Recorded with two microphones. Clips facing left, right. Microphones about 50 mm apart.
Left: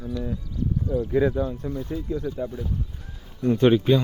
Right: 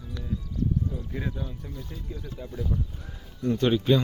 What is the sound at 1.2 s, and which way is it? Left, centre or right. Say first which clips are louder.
Speech: left 15 dB; left.